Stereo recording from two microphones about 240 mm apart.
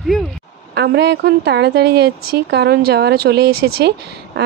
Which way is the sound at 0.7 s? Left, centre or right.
Right.